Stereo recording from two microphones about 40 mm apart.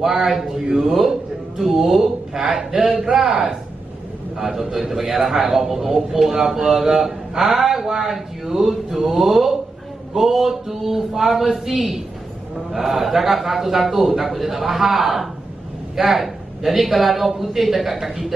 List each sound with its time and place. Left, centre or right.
0.0 s a man's voice: centre